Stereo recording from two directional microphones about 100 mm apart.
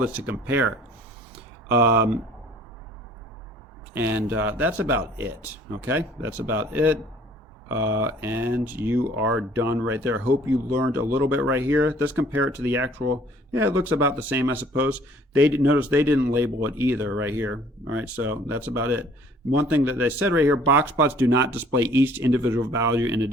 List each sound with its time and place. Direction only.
0.0 s speech: 15° right (ahead or behind)
3.9 s speech: 25° right (ahead or behind)